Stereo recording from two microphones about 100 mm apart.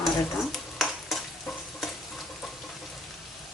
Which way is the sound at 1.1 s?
Centre (ahead or behind).